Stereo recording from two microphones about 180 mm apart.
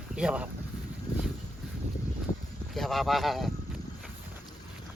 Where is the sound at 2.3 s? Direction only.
20° left (ahead or behind).